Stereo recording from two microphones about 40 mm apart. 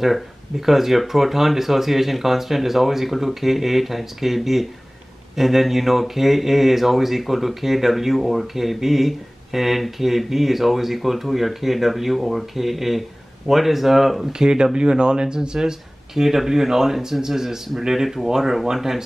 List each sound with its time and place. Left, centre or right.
0.0 s speech: centre
14.5 s speech: right